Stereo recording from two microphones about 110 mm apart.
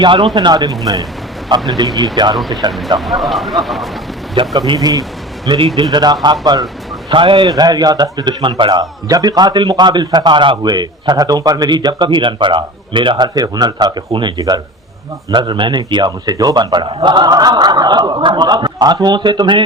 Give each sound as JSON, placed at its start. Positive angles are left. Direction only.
{"t": 0.0, "sound": "a man's voice", "side_deg": -45}
{"t": 2.3, "sound": "speech", "side_deg": 0}
{"t": 4.4, "sound": "a man's voice", "side_deg": -45}
{"t": 5.5, "sound": "a man's voice", "side_deg": -50}
{"t": 5.9, "sound": "a man's voice", "side_deg": -40}
{"t": 7.4, "sound": "a man's voice", "side_deg": -35}